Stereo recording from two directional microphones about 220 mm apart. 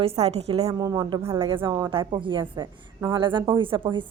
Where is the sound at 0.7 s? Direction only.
15° right (ahead or behind).